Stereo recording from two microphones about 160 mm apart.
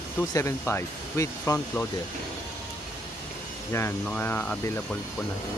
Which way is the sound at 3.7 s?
15° left (ahead or behind).